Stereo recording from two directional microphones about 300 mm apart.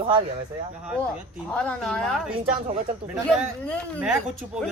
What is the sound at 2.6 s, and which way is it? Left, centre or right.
Speech, right.